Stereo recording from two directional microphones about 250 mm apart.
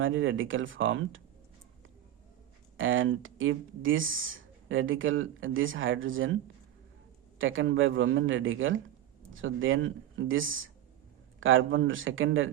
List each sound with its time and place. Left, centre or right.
0.0 s speech: right
2.7 s speech: right
7.3 s speech: right